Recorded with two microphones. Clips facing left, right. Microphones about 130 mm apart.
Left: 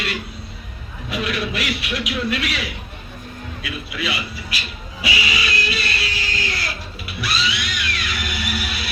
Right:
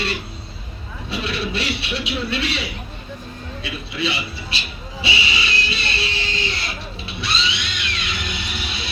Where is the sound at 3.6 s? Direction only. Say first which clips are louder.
Right 2 dB; 30° right (ahead or behind).